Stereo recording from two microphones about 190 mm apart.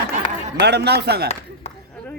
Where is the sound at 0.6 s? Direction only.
60° right (ahead or behind).